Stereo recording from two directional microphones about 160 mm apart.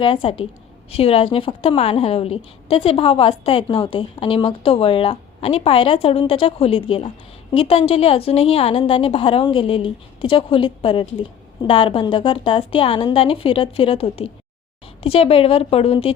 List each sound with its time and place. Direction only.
0.0 s a woman's voice: 35° left (ahead or behind)